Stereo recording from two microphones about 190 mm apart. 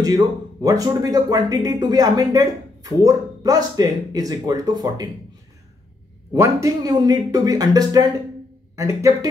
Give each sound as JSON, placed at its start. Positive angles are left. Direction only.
{"t": 0.0, "sound": "speech", "side_deg": -20}
{"t": 6.3, "sound": "speech", "side_deg": -15}